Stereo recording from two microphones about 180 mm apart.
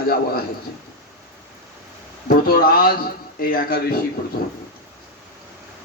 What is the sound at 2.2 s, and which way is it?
Speech, 55° left (ahead or behind).